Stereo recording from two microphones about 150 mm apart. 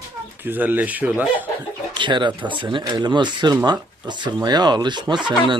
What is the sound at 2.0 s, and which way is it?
Speech, 30° right (ahead or behind).